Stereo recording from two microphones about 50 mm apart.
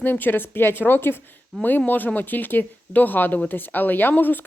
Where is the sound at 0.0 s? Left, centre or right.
Left.